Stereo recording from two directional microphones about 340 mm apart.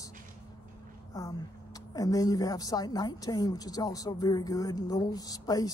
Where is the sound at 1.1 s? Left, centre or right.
Centre.